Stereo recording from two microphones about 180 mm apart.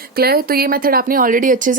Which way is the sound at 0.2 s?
60° right (ahead or behind).